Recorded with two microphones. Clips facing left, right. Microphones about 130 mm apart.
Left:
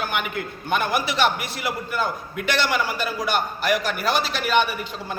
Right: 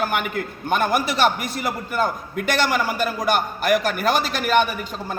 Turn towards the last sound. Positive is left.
turn(degrees=-45)  # may be behind; listen again after turning